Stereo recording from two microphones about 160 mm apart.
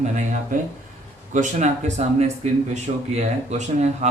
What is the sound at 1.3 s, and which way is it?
Speech, 45° right (ahead or behind).